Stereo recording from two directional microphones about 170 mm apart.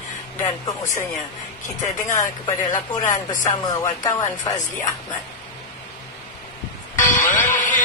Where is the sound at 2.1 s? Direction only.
25° left (ahead or behind).